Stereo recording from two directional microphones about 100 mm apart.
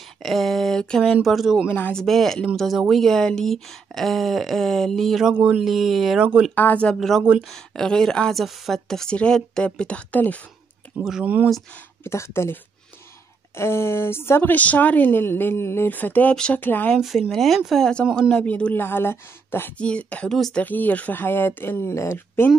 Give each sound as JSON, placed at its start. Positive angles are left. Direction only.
{"t": 0.2, "sound": "speech", "side_deg": 0}
{"t": 1.7, "sound": "a woman's voice", "side_deg": 20}
{"t": 2.0, "sound": "speech", "side_deg": 5}
{"t": 5.3, "sound": "speech", "side_deg": -10}
{"t": 6.5, "sound": "a woman's voice", "side_deg": 15}
{"t": 12.0, "sound": "a woman's voice", "side_deg": 25}
{"t": 13.6, "sound": "a woman's voice", "side_deg": 25}
{"t": 16.9, "sound": "a woman's voice", "side_deg": 0}
{"t": 19.8, "sound": "a woman's voice", "side_deg": 10}
{"t": 20.6, "sound": "a woman's voice", "side_deg": 15}